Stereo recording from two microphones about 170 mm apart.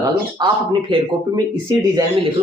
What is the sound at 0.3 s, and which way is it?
Speech, 25° right (ahead or behind).